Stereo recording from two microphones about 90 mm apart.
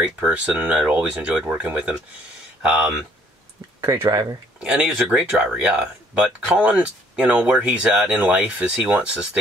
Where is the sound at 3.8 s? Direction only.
30° right (ahead or behind).